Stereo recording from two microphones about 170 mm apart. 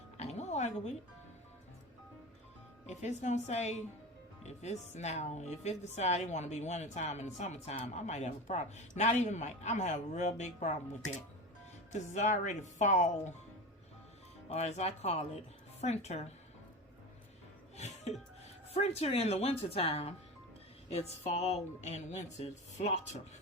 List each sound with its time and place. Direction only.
0.2 s music: 40° left (ahead or behind)
2.8 s a woman's voice: 45° left (ahead or behind)
14.5 s speech: 40° left (ahead or behind)
17.7 s music: 40° left (ahead or behind)
18.7 s speech: 35° left (ahead or behind)